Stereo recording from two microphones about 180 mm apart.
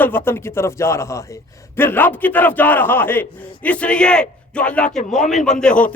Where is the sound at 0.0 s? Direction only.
10° left (ahead or behind).